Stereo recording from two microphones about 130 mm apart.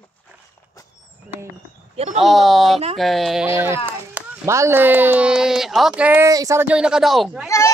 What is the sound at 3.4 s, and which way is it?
A child's voice, 15° right (ahead or behind).